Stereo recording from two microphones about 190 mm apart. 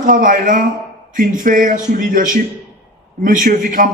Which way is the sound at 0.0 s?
45° right (ahead or behind).